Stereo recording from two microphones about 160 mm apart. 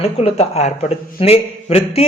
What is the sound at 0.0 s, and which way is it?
A man's voice, 40° left (ahead or behind).